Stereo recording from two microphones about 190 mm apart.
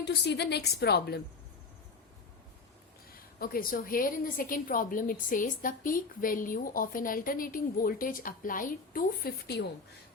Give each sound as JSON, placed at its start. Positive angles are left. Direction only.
{"t": 0.0, "sound": "a woman's voice", "side_deg": 60}
{"t": 3.1, "sound": "a woman's voice", "side_deg": 50}